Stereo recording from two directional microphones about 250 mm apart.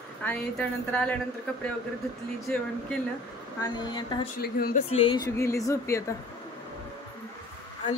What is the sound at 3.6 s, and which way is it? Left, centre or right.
Speech, centre.